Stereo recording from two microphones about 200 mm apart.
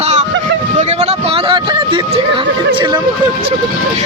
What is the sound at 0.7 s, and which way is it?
Speech, 35° right (ahead or behind).